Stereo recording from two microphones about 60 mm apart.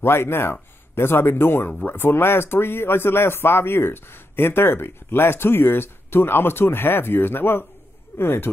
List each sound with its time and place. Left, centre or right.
0.0 s speech: left